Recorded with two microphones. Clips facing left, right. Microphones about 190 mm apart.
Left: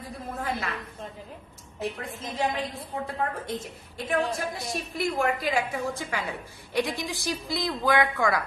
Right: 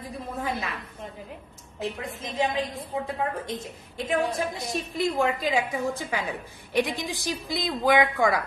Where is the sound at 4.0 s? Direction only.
20° right (ahead or behind).